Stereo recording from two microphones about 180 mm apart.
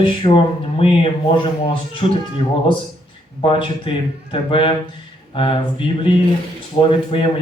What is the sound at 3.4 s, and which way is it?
Speech, 30° left (ahead or behind).